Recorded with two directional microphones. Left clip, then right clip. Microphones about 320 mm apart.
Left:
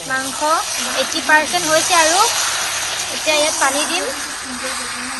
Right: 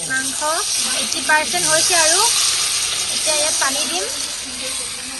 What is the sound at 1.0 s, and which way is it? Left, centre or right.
Speech, centre.